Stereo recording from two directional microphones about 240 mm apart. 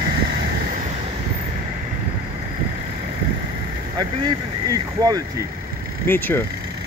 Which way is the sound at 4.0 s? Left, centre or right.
Centre.